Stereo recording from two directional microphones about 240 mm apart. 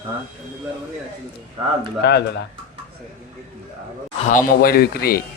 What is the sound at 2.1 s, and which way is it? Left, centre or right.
Speech, left.